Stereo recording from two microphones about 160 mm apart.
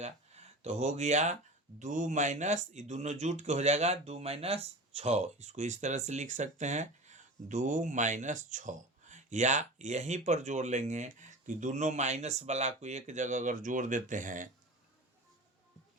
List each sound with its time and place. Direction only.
0.0 s speech: 40° right (ahead or behind)